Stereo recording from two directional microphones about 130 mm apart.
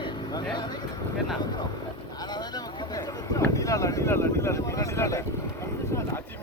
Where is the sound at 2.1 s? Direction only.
30° left (ahead or behind).